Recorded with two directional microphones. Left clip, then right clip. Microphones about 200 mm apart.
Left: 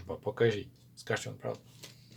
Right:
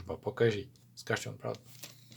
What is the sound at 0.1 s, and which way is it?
Speech, 15° right (ahead or behind).